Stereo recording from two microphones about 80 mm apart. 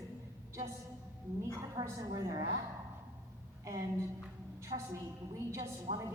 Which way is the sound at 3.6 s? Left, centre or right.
Right.